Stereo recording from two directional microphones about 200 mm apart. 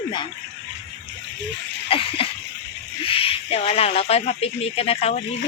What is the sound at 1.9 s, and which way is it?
Speech, 30° left (ahead or behind).